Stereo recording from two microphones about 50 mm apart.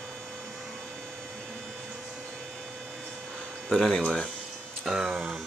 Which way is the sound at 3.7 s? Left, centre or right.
Centre.